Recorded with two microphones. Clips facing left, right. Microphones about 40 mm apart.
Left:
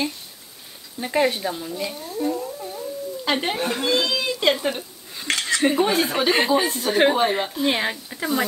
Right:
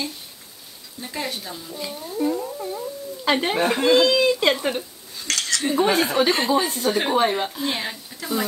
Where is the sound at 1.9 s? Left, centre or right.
Centre.